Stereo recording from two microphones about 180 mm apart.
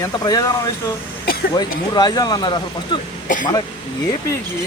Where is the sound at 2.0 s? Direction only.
20° left (ahead or behind).